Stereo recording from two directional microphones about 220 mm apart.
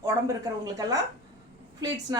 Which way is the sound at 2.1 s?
15° right (ahead or behind).